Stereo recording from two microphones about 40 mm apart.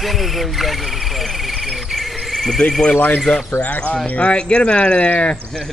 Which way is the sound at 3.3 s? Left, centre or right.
Left.